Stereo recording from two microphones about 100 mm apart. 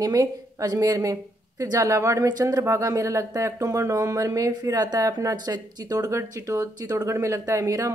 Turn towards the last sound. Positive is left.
turn(degrees=-30)  # may be behind; listen again after turning